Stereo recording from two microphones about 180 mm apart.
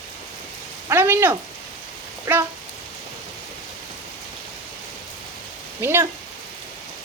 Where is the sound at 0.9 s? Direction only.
10° right (ahead or behind).